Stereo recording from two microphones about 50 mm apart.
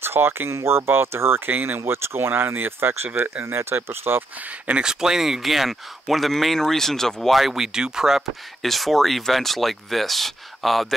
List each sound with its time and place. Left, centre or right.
0.0 s speech: right
4.4 s speech: right; by 8.2 s centre
8.6 s speech: centre